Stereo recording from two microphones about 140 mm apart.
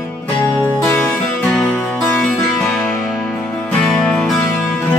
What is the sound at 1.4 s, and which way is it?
Music, 5° left (ahead or behind).